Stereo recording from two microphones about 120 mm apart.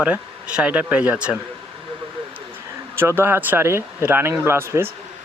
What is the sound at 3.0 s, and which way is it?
Speech, 20° right (ahead or behind).